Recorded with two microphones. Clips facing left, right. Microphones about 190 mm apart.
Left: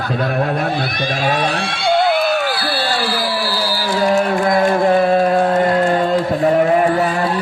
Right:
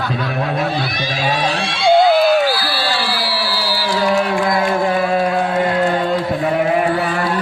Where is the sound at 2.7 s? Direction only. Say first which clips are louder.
Left 2 dB; 45° left (ahead or behind).